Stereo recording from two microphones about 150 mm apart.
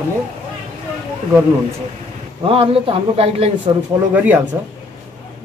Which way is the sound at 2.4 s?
40° right (ahead or behind).